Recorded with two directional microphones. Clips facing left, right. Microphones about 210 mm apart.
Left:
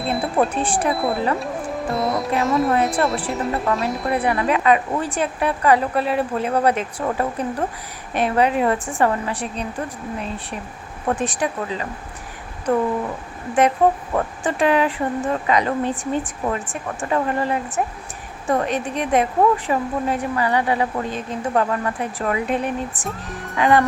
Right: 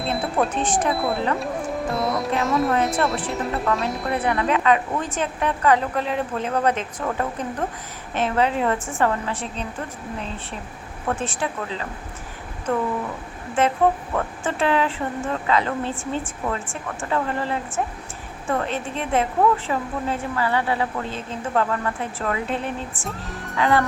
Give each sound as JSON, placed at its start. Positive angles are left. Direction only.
{"t": 0.5, "sound": "a woman's voice", "side_deg": 10}
{"t": 0.9, "sound": "a woman's voice", "side_deg": 0}
{"t": 13.6, "sound": "a woman's voice", "side_deg": 15}
{"t": 23.0, "sound": "speech", "side_deg": 0}
{"t": 23.6, "sound": "a woman's voice", "side_deg": 15}